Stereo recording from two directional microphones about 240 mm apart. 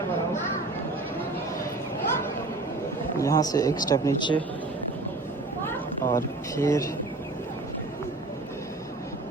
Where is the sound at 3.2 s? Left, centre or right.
Centre.